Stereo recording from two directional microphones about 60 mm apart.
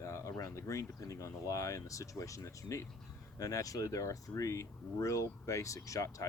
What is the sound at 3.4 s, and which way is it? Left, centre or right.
Speech, left.